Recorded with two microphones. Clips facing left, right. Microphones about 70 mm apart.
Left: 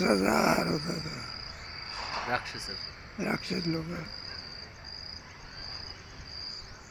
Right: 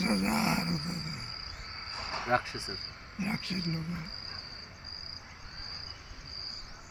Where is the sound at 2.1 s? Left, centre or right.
Centre.